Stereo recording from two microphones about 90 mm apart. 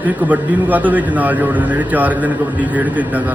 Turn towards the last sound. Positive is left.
turn(degrees=-20)  # may be behind; listen again after turning